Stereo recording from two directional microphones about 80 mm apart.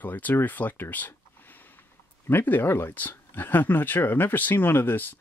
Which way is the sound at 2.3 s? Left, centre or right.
Left.